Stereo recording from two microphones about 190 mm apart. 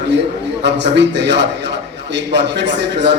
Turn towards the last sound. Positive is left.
turn(degrees=-65)  # may be behind; listen again after turning